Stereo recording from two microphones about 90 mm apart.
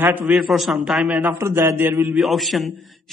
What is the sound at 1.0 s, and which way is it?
Speech, 15° right (ahead or behind).